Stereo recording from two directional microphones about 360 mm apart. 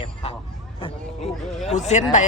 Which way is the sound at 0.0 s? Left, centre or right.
Centre.